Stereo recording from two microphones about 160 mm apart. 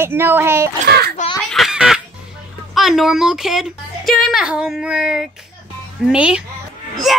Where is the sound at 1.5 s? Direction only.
Centre (ahead or behind).